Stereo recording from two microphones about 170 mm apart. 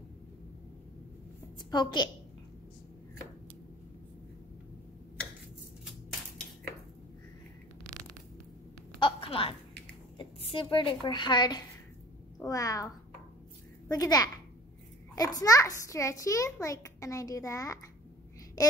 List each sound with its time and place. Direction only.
1.7 s a child's voice: 25° left (ahead or behind)
9.0 s a sound: 30° left (ahead or behind)
10.1 s a woman's voice: 30° left (ahead or behind)